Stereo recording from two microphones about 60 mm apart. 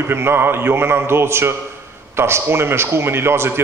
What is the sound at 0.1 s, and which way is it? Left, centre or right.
A man's voice, right.